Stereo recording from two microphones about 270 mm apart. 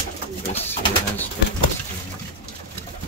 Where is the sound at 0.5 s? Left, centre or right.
Centre.